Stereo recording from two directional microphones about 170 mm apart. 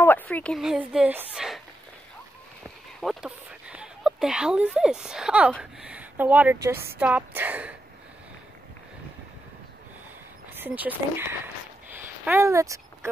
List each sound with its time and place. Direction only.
0.0 s a woman's voice: 10° left (ahead or behind)
3.0 s a woman's voice: centre (ahead or behind)
10.5 s speech: 10° right (ahead or behind)
11.9 s a sound: 15° right (ahead or behind)